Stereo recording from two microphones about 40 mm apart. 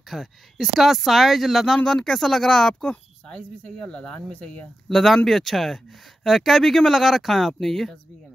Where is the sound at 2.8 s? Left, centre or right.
Left.